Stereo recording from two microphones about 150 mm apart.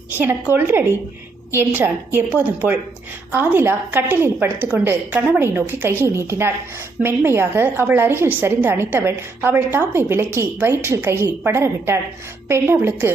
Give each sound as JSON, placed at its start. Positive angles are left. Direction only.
{"t": 0.1, "sound": "a woman's voice", "side_deg": -15}